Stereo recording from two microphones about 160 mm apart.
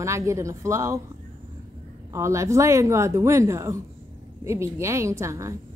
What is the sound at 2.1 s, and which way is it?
A woman's voice, 20° right (ahead or behind).